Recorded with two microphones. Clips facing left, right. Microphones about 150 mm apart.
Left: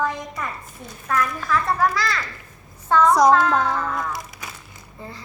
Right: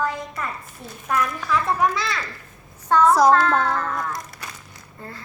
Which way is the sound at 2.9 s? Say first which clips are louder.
Even; 5° right (ahead or behind).